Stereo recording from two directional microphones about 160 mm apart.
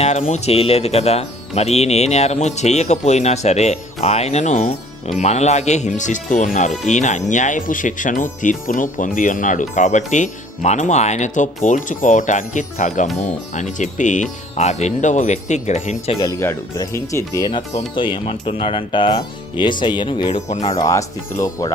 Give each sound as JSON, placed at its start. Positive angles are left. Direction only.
{"t": 0.0, "sound": "speech", "side_deg": 45}
{"t": 16.2, "sound": "speech", "side_deg": 15}
{"t": 20.5, "sound": "speech", "side_deg": 45}
{"t": 20.7, "sound": "speech", "side_deg": 20}